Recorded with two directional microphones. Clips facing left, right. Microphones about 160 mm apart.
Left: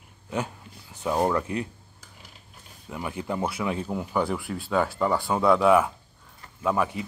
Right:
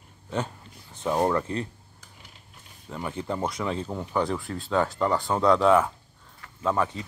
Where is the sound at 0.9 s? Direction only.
5° left (ahead or behind).